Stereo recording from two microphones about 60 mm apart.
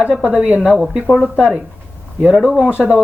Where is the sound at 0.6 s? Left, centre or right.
Centre.